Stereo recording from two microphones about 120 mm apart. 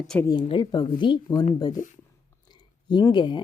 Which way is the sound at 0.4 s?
40° left (ahead or behind).